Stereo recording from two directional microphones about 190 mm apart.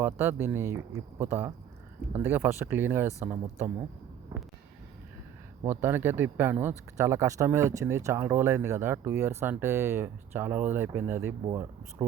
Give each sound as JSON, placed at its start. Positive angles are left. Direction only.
{"t": 0.0, "sound": "speech", "side_deg": -10}
{"t": 5.6, "sound": "speech", "side_deg": -10}